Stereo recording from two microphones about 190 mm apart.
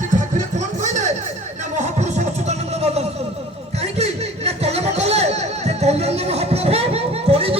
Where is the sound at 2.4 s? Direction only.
35° right (ahead or behind).